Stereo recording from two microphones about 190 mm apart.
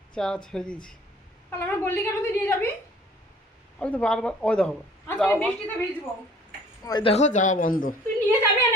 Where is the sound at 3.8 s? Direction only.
5° left (ahead or behind).